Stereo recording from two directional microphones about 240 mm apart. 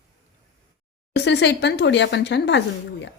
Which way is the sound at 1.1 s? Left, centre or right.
Left.